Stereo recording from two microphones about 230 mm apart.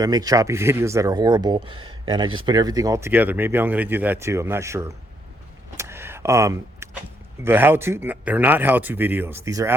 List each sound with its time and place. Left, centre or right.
0.0 s speech: centre
5.7 s vehicle: centre
7.4 s speech: centre